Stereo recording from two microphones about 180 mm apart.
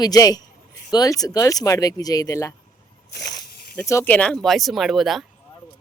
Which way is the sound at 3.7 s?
15° left (ahead or behind).